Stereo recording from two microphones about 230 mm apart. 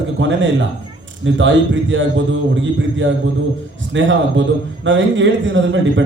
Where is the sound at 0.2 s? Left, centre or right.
Right.